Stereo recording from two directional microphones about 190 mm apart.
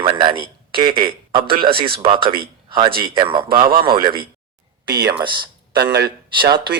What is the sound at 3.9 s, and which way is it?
A man's voice, 50° right (ahead or behind).